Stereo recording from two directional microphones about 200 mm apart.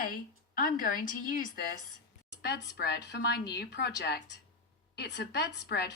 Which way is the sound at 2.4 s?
55° left (ahead or behind).